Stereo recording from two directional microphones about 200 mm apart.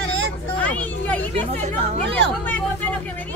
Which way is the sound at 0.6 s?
5° left (ahead or behind).